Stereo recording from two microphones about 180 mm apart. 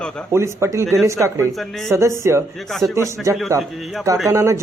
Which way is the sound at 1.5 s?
Centre (ahead or behind).